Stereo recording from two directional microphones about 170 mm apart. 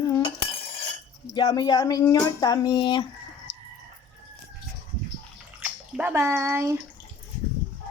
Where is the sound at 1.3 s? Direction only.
25° left (ahead or behind).